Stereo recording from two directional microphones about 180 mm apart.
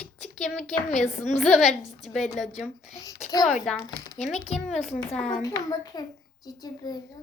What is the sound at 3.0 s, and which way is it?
Speech, 15° left (ahead or behind).